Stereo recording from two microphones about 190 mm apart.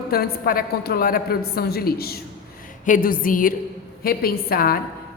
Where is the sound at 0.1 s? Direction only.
50° left (ahead or behind).